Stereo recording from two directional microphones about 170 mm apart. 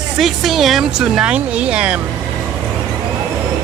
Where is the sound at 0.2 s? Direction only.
Centre (ahead or behind).